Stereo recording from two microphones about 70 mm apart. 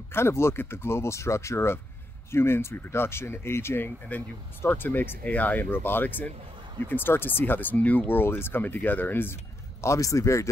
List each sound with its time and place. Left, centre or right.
0.1 s speech: left
9.8 s speech: left